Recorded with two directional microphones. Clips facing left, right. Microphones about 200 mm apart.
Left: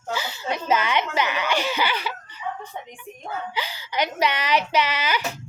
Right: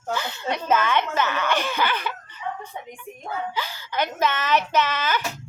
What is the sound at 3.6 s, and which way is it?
Speech, 15° left (ahead or behind).